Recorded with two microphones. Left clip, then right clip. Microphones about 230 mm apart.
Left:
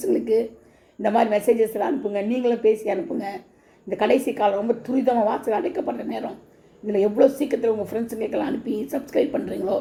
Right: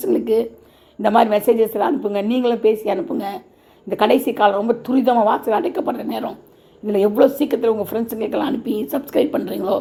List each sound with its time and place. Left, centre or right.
0.0 s a woman's voice: right